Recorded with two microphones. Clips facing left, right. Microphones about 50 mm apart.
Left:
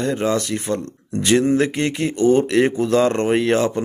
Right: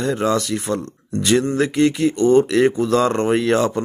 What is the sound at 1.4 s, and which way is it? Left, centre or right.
Speech, centre.